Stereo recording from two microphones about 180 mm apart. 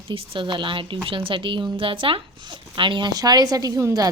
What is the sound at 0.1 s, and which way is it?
Speech, 30° right (ahead or behind).